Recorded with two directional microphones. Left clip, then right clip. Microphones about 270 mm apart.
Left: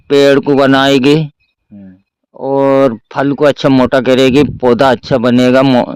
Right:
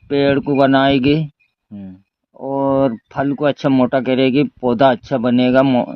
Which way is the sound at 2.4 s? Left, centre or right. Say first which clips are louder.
Left 7 dB; left.